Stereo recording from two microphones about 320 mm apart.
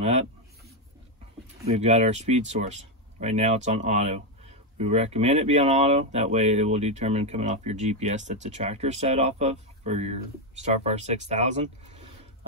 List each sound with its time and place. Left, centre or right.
1.7 s speech: right